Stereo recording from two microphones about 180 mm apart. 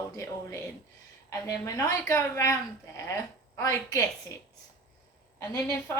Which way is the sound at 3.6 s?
15° left (ahead or behind).